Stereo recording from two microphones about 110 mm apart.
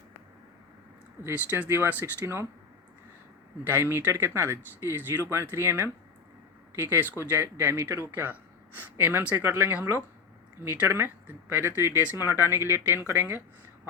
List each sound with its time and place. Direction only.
1.2 s speech: 20° right (ahead or behind)
3.7 s speech: 20° right (ahead or behind)